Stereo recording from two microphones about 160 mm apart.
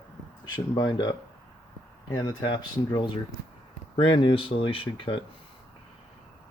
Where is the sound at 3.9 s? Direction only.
30° left (ahead or behind).